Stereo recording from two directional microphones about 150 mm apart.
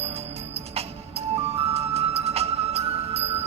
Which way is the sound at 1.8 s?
45° right (ahead or behind).